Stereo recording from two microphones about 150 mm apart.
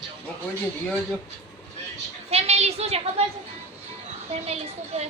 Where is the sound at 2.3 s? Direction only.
45° right (ahead or behind).